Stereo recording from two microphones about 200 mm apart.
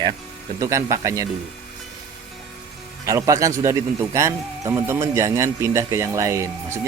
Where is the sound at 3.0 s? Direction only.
15° right (ahead or behind).